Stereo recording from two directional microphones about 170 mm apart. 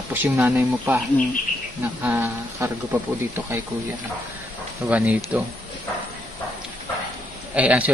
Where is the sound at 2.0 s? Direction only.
15° right (ahead or behind).